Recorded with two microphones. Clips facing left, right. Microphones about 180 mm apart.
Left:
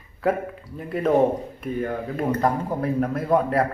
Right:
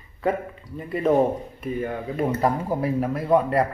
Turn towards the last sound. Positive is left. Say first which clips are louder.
# right 1 dB
turn(degrees=0)  # may be behind; listen again after turning